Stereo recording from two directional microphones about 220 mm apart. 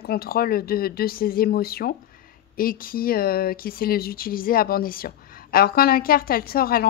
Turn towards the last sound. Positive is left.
turn(degrees=40)  # may be behind; listen again after turning